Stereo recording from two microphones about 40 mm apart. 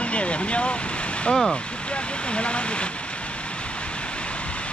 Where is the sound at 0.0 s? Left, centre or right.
Left.